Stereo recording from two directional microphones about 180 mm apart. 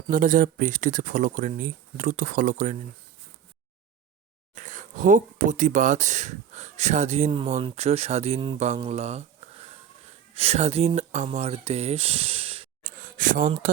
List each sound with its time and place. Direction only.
0.1 s speech: 50° right (ahead or behind)
4.5 s speech: 45° right (ahead or behind)
12.8 s a sound: 45° right (ahead or behind)